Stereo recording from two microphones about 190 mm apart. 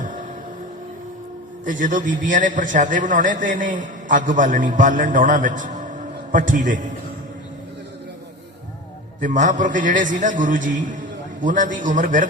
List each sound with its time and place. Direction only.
0.0 s music: 45° right (ahead or behind)
1.6 s a man's voice: 45° right (ahead or behind)
9.2 s a man's voice: 45° right (ahead or behind)